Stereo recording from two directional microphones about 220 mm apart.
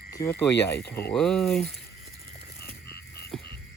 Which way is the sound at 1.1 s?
Centre (ahead or behind).